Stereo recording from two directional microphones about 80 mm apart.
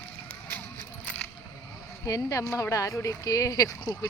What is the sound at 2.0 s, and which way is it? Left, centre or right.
Speech, left.